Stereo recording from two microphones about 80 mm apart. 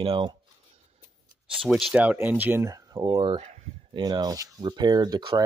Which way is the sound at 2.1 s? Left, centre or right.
Right.